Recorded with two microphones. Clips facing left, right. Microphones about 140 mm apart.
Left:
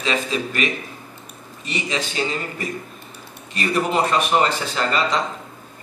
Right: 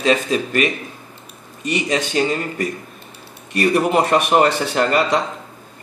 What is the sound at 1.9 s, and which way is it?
Speech, 45° right (ahead or behind).